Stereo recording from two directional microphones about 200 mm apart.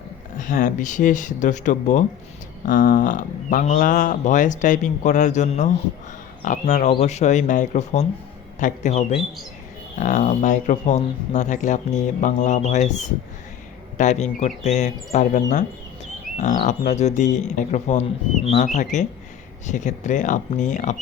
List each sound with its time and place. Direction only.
0.3 s speech: 40° left (ahead or behind)
16.4 s speech: 40° left (ahead or behind)